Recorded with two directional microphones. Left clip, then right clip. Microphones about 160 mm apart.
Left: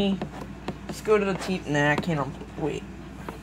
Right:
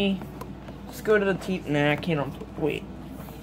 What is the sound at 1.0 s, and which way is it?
Speech, 10° right (ahead or behind).